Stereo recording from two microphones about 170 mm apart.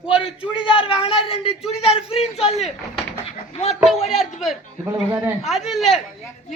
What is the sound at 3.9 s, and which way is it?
Speech, 40° left (ahead or behind).